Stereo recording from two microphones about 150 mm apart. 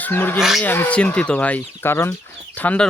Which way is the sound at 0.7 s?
10° left (ahead or behind).